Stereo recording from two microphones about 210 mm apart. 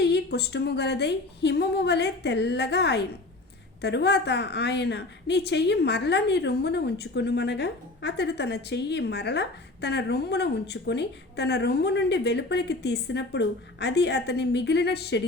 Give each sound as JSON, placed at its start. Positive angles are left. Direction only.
{"t": 0.0, "sound": "a woman's voice", "side_deg": 55}